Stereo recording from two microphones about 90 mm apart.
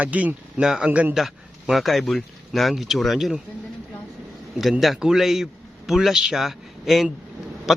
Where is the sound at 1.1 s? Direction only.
5° right (ahead or behind).